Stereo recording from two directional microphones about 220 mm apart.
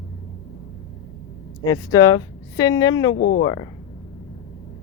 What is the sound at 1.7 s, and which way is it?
Speech, 15° left (ahead or behind).